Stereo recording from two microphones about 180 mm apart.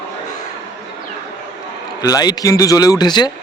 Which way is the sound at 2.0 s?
20° left (ahead or behind).